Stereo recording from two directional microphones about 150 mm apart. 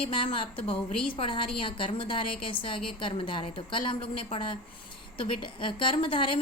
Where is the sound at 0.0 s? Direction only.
35° left (ahead or behind).